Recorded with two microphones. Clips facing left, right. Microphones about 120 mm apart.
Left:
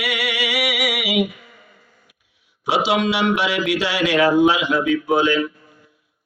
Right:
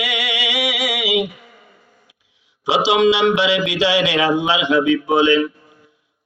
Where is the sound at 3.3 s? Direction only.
90° right.